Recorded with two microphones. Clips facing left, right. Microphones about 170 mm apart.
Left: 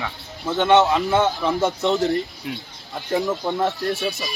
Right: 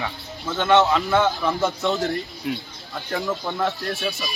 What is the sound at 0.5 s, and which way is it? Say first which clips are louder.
A man's voice: left 2 dB; 20° left (ahead or behind).